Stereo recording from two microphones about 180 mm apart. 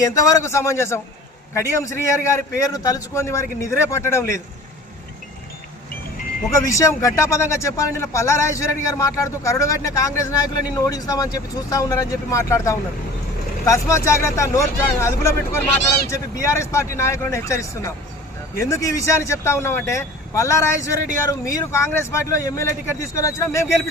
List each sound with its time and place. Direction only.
0.0 s speech: 20° left (ahead or behind)
6.7 s speech: 15° left (ahead or behind)